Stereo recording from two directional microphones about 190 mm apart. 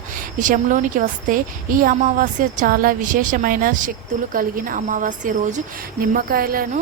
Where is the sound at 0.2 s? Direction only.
45° right (ahead or behind).